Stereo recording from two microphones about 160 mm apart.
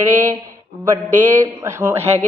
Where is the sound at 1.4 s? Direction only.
15° right (ahead or behind).